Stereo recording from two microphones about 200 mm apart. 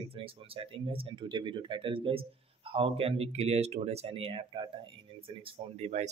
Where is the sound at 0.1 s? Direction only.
25° right (ahead or behind).